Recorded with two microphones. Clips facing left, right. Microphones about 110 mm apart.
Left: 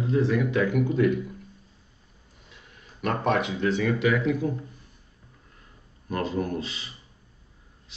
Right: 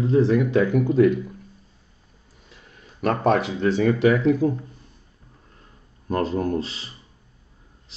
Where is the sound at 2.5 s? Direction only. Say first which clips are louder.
Right 3 dB; 40° right (ahead or behind).